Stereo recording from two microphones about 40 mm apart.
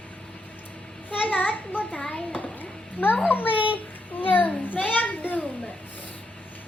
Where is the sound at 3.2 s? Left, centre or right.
Left.